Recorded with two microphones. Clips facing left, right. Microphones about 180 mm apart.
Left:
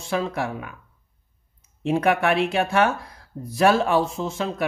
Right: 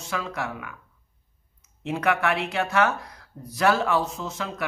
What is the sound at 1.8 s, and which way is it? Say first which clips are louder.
Speech: left 4 dB; 30° left (ahead or behind).